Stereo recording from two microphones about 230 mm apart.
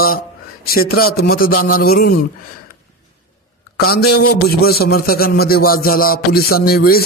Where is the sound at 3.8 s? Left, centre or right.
Left.